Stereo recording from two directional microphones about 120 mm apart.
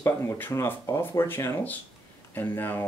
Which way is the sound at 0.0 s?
20° left (ahead or behind).